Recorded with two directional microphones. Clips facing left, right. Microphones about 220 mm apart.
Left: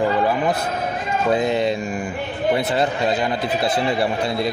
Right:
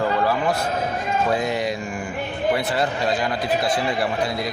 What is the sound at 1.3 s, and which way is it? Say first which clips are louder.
Speech: left 4 dB; 25° left (ahead or behind).